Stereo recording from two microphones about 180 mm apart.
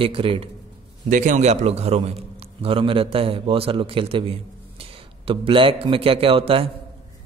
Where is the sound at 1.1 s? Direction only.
45° right (ahead or behind).